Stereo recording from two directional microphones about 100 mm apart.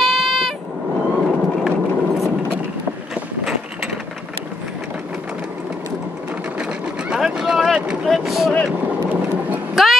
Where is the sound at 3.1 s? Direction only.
5° right (ahead or behind).